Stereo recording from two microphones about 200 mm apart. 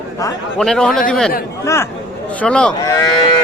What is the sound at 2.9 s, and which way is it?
Speech, 15° left (ahead or behind).